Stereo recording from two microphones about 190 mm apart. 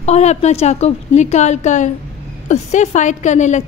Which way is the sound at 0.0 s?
35° left (ahead or behind).